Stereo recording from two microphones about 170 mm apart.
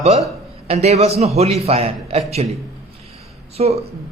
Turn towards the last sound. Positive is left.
turn(degrees=-35)  # may be behind; listen again after turning